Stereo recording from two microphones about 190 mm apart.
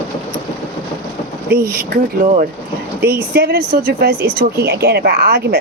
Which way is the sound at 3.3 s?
55° right (ahead or behind).